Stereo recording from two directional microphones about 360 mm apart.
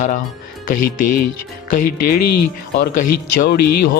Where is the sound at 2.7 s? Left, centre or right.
Left.